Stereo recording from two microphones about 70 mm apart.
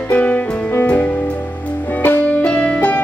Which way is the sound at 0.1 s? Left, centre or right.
Left.